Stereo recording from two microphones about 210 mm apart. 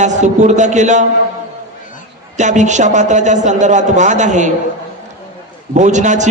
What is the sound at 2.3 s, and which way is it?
A man's voice, 35° right (ahead or behind).